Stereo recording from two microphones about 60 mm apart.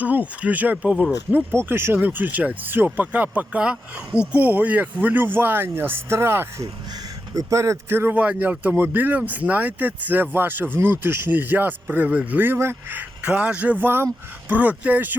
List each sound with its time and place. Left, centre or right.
0.0 s speech: right
1.5 s speech: right
6.6 s speech: right
7.9 s speech: right
8.1 s speech: right
12.4 s speech: right
13.0 s speech: right